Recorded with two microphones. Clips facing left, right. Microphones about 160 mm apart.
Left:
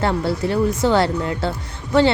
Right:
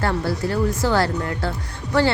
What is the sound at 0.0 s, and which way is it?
A woman's voice, 20° left (ahead or behind).